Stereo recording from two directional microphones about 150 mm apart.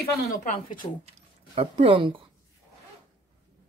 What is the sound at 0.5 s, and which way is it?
Speech, 65° left (ahead or behind).